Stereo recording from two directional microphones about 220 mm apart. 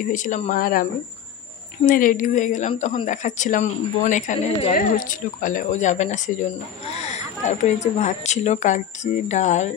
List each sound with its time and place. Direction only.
0.0 s a woman's voice: 35° left (ahead or behind)